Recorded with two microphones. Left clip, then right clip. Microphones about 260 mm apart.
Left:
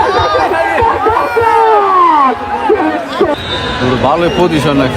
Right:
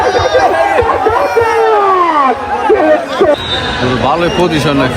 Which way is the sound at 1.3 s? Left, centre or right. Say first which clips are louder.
Left 1 dB; left.